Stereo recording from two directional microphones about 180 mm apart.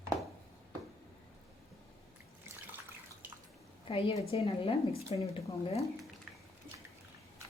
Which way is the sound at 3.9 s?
30° left (ahead or behind).